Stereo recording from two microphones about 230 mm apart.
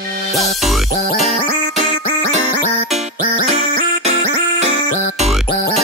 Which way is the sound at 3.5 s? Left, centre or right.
Right.